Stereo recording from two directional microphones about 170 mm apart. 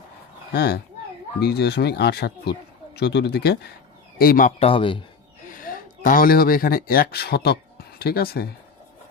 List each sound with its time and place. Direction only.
0.5 s speech: 65° left (ahead or behind)
4.2 s speech: 55° left (ahead or behind)
4.6 s speech: 30° left (ahead or behind)
5.5 s speech: 55° left (ahead or behind)